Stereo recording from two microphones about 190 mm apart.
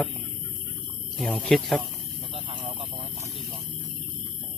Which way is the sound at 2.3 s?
30° right (ahead or behind).